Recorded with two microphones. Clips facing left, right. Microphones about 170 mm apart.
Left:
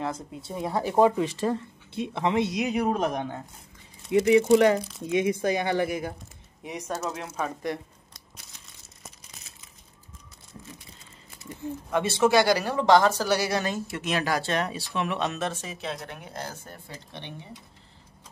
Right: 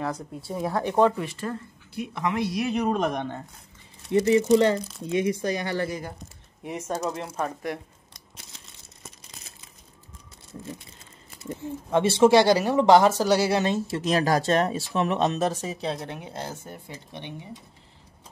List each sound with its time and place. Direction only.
0.7 s speech: centre (ahead or behind)
1.5 s speech: 25° left (ahead or behind)
2.7 s speech: 5° left (ahead or behind)
6.9 s speech: 10° right (ahead or behind)
11.9 s speech: 25° right (ahead or behind)